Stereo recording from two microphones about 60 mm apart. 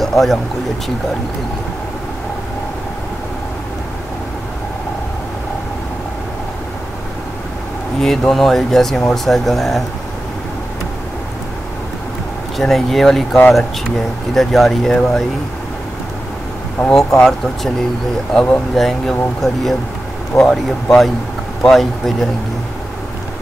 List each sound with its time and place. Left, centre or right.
0.0 s speech: centre
8.0 s speech: centre
12.5 s speech: centre
16.9 s speech: centre
18.8 s speech: centre